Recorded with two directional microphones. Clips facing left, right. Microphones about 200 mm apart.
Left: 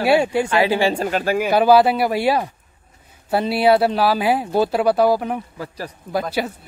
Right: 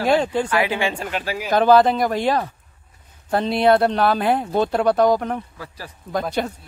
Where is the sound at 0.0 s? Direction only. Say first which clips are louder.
Left 2 dB; 10° left (ahead or behind).